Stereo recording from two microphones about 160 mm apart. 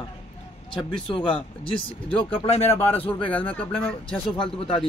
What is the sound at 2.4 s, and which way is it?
Speech, 40° left (ahead or behind).